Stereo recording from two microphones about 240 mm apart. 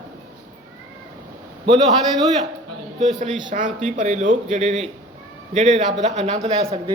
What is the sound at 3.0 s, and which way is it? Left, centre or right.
A man's voice, right.